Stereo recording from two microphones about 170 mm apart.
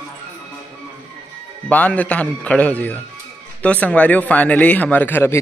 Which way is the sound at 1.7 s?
10° left (ahead or behind).